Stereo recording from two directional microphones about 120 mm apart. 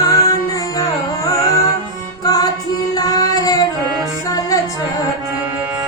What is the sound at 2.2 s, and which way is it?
Music, 30° left (ahead or behind).